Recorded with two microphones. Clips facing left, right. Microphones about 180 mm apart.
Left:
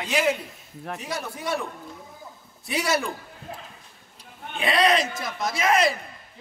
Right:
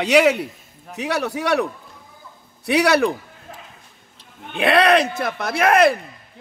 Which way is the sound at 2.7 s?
65° right (ahead or behind).